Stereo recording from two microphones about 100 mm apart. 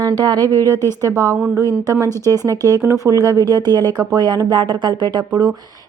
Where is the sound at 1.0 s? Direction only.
30° right (ahead or behind).